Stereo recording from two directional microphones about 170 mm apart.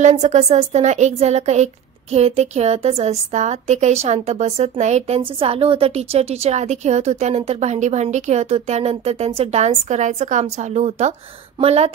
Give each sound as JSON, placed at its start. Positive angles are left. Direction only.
{"t": 0.0, "sound": "a woman's voice", "side_deg": -45}